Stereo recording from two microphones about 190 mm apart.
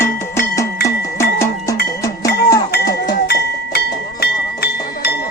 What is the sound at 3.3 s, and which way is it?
Music, 60° left (ahead or behind).